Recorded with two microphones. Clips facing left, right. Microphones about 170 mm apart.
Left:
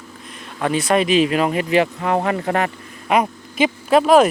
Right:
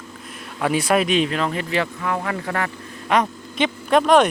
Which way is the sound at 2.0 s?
35° left (ahead or behind).